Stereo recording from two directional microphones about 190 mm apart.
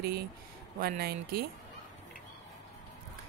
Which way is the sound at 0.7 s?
50° right (ahead or behind).